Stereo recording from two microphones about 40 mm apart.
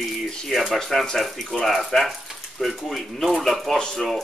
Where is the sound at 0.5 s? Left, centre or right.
Centre.